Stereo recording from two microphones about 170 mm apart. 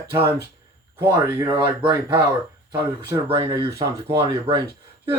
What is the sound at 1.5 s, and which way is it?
Speech, 25° right (ahead or behind).